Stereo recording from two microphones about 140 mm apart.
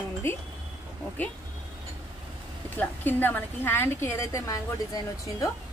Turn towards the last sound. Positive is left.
turn(degrees=25)  # may be behind; listen again after turning